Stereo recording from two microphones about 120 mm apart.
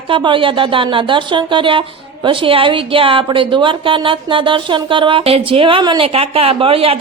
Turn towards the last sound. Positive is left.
turn(degrees=-50)  # may be behind; listen again after turning